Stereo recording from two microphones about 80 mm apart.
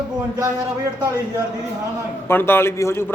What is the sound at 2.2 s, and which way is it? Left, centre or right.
Speech, left.